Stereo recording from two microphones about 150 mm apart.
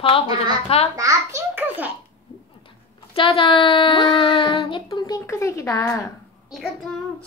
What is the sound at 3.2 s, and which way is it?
Speech, 35° left (ahead or behind).